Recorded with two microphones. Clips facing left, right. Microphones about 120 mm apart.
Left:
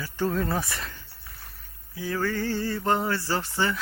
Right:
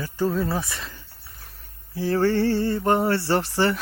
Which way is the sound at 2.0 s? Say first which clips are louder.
Right 7 dB; 35° right (ahead or behind).